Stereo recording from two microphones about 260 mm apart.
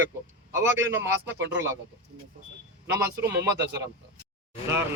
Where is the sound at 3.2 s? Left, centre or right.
Centre.